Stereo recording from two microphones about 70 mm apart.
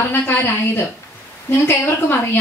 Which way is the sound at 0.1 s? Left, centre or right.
Left.